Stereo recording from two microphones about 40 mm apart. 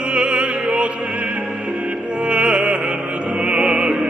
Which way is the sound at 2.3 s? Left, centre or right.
Right.